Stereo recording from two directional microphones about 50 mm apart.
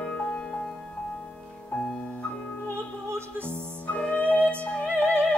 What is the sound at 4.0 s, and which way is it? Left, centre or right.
Music, left.